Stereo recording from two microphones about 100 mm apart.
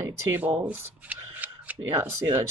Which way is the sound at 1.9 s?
25° right (ahead or behind).